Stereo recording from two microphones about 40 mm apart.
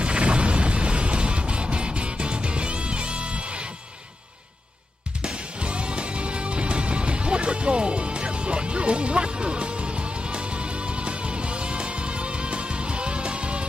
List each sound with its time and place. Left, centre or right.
0.0 s music: right
5.2 s music: right